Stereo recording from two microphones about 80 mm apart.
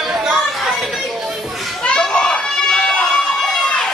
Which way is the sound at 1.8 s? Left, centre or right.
Centre.